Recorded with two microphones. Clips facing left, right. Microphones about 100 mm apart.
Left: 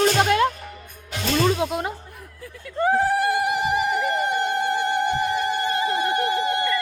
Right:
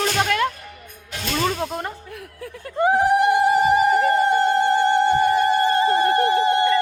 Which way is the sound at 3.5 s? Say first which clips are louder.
Right 6 dB; 40° right (ahead or behind).